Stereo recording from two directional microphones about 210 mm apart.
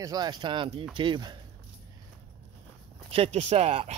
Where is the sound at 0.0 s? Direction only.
20° right (ahead or behind).